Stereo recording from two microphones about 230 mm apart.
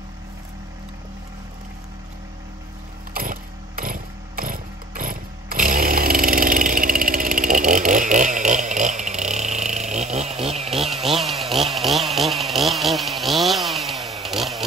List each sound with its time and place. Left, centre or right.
3.2 s vehicle: right
11.1 s chainsaw: centre